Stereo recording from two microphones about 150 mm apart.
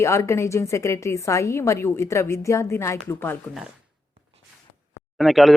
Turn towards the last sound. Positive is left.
turn(degrees=0)  # may be behind; listen again after turning